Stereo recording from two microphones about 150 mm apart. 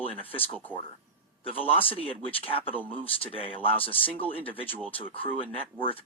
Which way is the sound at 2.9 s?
35° left (ahead or behind).